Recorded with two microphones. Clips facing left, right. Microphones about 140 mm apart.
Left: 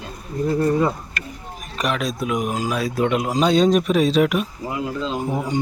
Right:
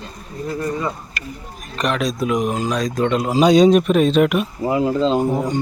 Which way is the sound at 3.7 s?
Centre (ahead or behind).